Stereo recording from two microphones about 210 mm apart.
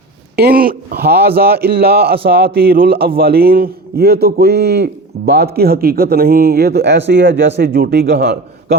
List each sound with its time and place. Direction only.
0.3 s a man's voice: 45° right (ahead or behind)